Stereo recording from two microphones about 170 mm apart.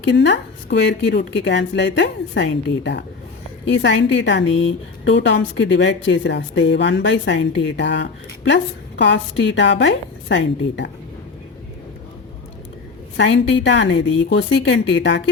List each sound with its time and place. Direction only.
0.0 s a woman's voice: 90° left
13.1 s a woman's voice: 90° left